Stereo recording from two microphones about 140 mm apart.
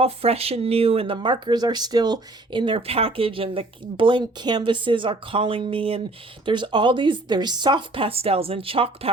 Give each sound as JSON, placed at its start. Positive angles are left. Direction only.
{"t": 0.0, "sound": "speech", "side_deg": -45}